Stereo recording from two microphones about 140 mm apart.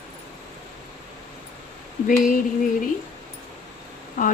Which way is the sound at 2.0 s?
75° left (ahead or behind).